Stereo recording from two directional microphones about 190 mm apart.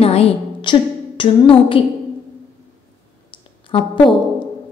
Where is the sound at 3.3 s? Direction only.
25° left (ahead or behind).